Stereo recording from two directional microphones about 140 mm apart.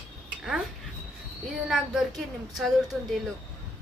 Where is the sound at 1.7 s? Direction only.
Centre (ahead or behind).